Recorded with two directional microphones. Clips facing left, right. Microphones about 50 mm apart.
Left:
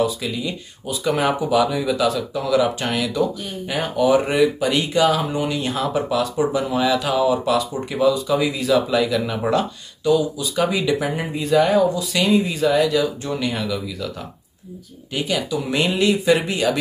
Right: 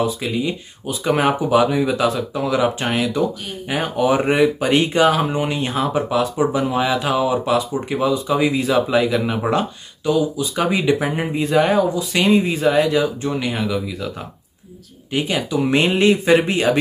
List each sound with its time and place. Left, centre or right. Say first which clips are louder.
0.0 s speech: right 1 dB; right
15.1 s speech: right 3 dB; right